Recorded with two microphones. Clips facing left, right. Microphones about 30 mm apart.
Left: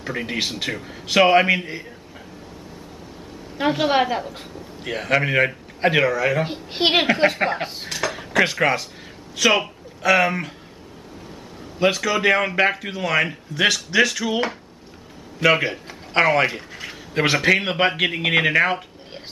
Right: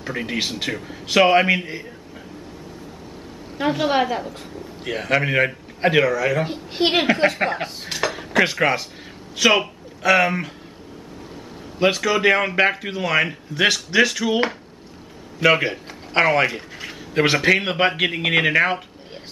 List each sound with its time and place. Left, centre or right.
0.0 s a man's voice: centre
3.5 s a woman's voice: centre
7.1 s a man's voice: centre
7.9 s dishes: centre
9.4 s speech: centre
11.8 s a man's voice: centre
15.4 s a man's voice: centre